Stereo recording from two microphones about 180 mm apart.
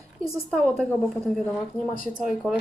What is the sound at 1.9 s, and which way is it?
Speech, 50° left (ahead or behind).